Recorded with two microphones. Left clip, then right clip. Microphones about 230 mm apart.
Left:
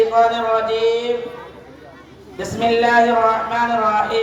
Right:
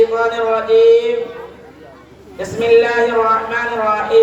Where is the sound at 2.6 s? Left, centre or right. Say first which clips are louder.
Right 2 dB; left.